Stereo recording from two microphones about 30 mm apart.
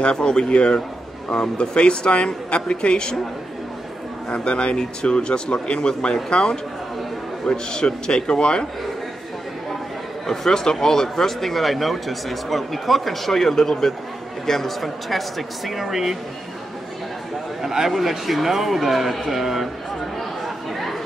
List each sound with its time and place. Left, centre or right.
0.1 s speech: left
1.3 s a man's voice: left
1.8 s speech: left
4.3 s a man's voice: left
10.2 s a man's voice: centre
14.8 s speech: centre
17.6 s speech: centre
20.2 s chatter: centre